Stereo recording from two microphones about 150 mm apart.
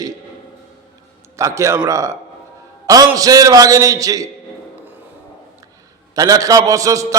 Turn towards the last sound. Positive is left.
turn(degrees=-20)  # may be behind; listen again after turning